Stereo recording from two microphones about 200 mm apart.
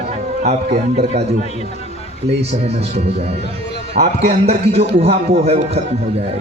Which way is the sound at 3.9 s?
30° right (ahead or behind).